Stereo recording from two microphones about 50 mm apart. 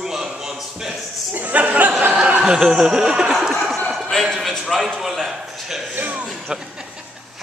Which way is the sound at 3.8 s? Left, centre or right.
Centre.